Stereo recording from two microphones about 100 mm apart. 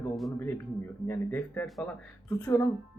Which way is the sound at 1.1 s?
20° left (ahead or behind).